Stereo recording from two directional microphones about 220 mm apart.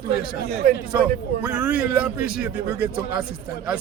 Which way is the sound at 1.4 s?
5° right (ahead or behind).